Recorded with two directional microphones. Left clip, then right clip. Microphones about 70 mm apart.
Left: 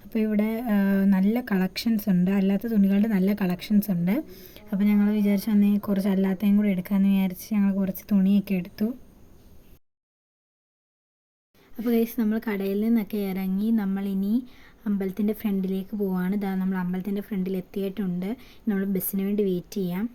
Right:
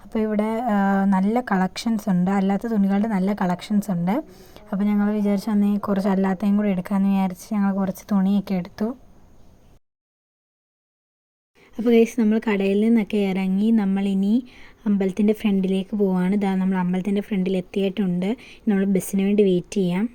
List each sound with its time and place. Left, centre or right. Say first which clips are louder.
0.3 s speech: right 5 dB; right
4.3 s speech: even; centre
4.5 s speech: right 1 dB; right
8.1 s speech: even; right
11.8 s speech: right 8 dB; right